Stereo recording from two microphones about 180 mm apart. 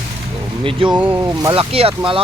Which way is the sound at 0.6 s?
30° right (ahead or behind).